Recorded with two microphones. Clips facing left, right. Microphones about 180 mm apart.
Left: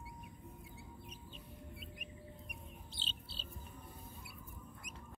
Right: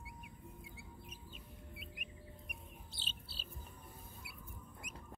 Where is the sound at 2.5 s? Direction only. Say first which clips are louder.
Left 2 dB; 10° right (ahead or behind).